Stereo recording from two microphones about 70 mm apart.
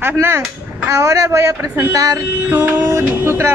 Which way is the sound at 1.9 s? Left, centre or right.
Right.